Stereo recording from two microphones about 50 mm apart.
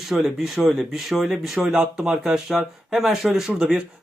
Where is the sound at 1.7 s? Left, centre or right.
Centre.